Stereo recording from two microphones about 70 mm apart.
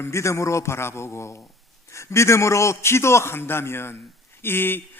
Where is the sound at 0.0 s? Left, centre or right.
Left.